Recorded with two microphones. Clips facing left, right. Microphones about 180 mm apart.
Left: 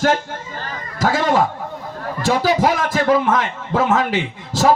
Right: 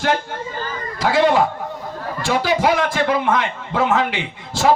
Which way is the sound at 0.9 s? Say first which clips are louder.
Right 2 dB; 40° left (ahead or behind).